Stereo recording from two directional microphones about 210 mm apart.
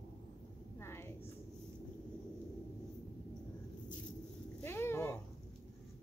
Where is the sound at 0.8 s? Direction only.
10° left (ahead or behind).